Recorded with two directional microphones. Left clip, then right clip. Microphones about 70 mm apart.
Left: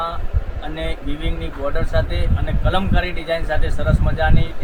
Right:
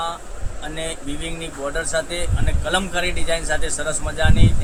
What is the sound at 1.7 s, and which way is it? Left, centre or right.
A man's voice, right.